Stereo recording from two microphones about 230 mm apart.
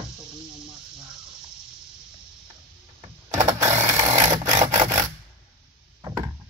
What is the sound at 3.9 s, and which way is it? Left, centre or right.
Sewing machine, centre.